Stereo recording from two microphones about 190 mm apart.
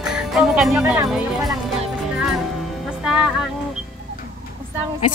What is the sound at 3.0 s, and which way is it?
Music, 5° right (ahead or behind).